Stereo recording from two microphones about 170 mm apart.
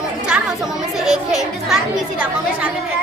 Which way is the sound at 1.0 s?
5° right (ahead or behind).